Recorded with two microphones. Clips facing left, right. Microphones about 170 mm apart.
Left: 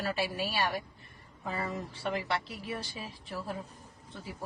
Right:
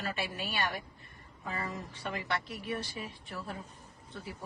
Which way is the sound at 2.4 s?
25° left (ahead or behind).